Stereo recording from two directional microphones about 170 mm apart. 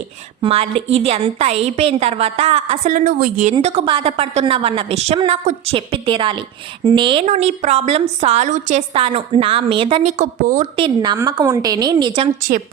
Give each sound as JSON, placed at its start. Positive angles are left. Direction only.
{"t": 0.4, "sound": "a woman's voice", "side_deg": -35}
{"t": 3.6, "sound": "a woman's voice", "side_deg": -35}
{"t": 7.3, "sound": "a woman's voice", "side_deg": -40}
{"t": 10.4, "sound": "a woman's voice", "side_deg": -50}
{"t": 10.8, "sound": "a woman's voice", "side_deg": -25}
{"t": 12.4, "sound": "a woman's voice", "side_deg": -55}